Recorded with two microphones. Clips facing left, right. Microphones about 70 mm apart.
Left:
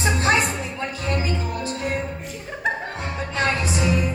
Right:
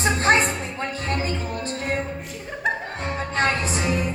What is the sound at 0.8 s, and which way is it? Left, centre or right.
Music, right.